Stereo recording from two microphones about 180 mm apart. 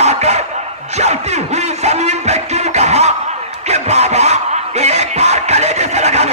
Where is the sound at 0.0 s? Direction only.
35° right (ahead or behind).